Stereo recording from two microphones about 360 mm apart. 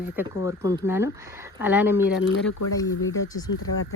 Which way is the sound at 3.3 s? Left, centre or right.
Centre.